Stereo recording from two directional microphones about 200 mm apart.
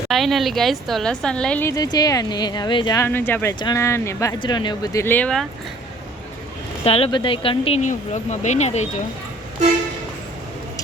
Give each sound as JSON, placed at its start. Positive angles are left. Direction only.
{"t": 0.1, "sound": "a woman's voice", "side_deg": 0}
{"t": 6.8, "sound": "speech", "side_deg": 30}